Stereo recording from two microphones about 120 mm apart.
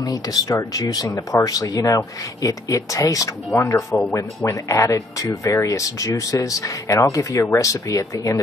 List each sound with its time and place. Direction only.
0.0 s speech: 30° left (ahead or behind)